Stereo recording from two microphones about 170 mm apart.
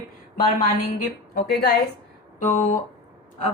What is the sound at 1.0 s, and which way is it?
Speech, 65° left (ahead or behind).